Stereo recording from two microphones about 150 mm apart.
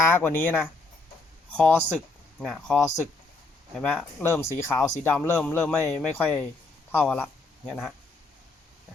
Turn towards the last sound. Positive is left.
turn(degrees=5)  # may be behind; listen again after turning